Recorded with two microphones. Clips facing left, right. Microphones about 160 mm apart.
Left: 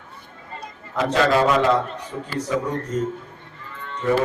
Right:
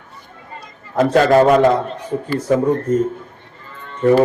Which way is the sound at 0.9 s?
50° right (ahead or behind).